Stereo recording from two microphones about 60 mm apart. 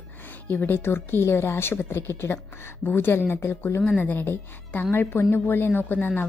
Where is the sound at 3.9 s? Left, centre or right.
Left.